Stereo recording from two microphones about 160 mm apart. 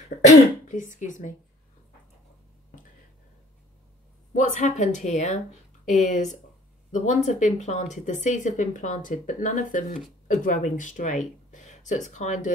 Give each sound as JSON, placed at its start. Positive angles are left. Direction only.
{"t": 0.3, "sound": "speech", "side_deg": 50}
{"t": 4.3, "sound": "speech", "side_deg": 50}